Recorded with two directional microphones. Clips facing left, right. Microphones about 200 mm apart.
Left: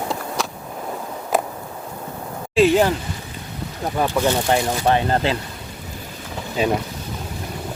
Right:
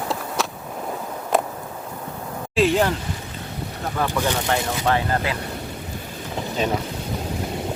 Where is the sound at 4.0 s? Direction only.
15° left (ahead or behind).